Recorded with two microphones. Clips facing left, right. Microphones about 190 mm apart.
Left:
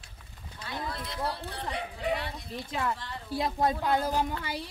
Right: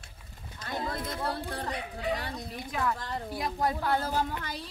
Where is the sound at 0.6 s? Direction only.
45° right (ahead or behind).